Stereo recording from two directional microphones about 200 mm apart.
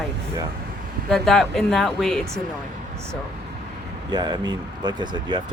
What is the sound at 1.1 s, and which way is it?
Speech, centre (ahead or behind).